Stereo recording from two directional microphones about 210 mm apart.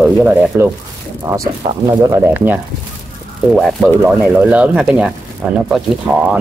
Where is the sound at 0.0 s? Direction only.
10° right (ahead or behind).